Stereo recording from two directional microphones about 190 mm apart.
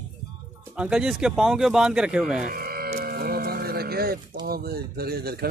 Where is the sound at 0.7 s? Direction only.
5° right (ahead or behind).